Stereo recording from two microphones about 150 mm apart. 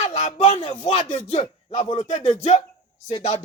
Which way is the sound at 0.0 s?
50° left (ahead or behind).